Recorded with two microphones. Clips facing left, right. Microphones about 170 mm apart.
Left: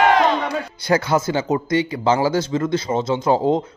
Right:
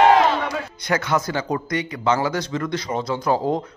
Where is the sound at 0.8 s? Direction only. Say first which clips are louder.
Left 4 dB; 30° left (ahead or behind).